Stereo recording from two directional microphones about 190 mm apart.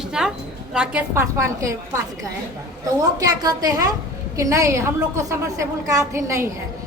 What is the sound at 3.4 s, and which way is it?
A woman's voice, 20° right (ahead or behind).